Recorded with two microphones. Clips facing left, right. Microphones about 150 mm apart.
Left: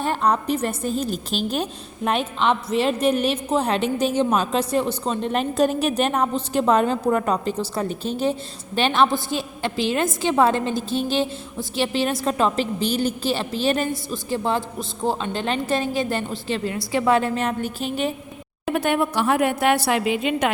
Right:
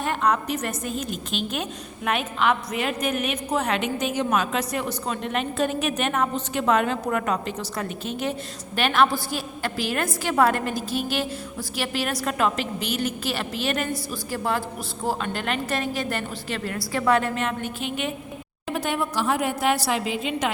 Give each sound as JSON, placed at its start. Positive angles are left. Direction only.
{"t": 0.0, "sound": "a woman's voice", "side_deg": 35}
{"t": 18.6, "sound": "a woman's voice", "side_deg": 60}